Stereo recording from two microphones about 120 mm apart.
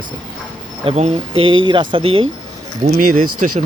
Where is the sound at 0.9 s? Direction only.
55° right (ahead or behind).